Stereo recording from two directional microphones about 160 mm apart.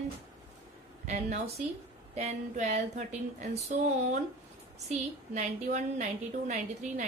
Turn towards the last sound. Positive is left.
turn(degrees=-50)  # may be behind; listen again after turning